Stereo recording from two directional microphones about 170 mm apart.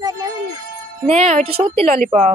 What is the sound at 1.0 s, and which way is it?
Speech, 40° right (ahead or behind).